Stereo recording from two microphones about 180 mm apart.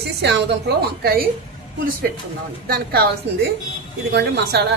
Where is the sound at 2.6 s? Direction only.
60° right (ahead or behind).